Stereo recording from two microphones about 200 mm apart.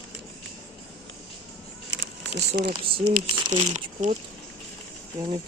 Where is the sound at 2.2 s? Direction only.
60° right (ahead or behind).